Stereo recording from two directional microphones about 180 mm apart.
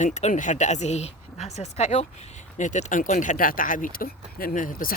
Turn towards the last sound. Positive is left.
turn(degrees=50)  # may be behind; listen again after turning